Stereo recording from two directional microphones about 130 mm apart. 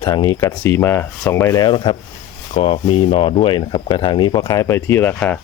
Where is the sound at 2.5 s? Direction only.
50° left (ahead or behind).